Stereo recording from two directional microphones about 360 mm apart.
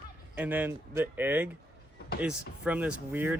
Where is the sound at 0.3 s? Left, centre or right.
Centre.